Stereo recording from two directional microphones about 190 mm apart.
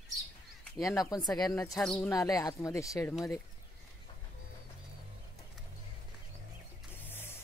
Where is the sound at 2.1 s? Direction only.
20° left (ahead or behind).